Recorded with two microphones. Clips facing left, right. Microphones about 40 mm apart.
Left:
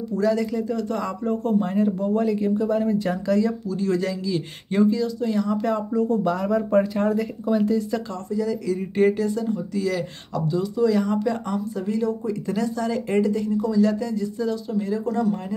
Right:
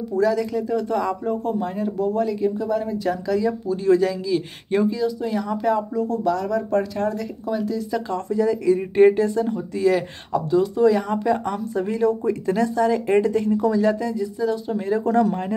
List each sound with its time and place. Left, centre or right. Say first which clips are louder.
0.1 s speech: right 2 dB; centre
3.7 s speech: right 5 dB; centre
8.3 s speech: right 5 dB; right
10.9 s speech: right 2 dB; centre
11.5 s speech: right 1 dB; right
12.5 s speech: right 5 dB; centre
13.2 s speech: right 2 dB; right
13.7 s speech: right 1 dB; centre
14.5 s speech: right 2 dB; right
15.0 s speech: right 7 dB; right